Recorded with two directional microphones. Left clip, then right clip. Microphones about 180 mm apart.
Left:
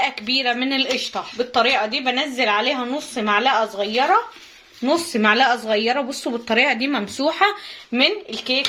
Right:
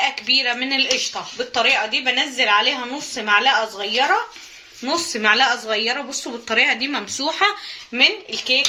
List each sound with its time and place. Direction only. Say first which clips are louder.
0.0 s speech: right 2 dB; 55° left (ahead or behind)